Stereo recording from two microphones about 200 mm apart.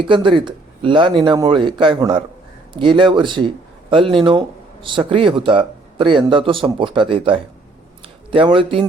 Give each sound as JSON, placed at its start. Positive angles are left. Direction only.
{"t": 0.0, "sound": "speech", "side_deg": -25}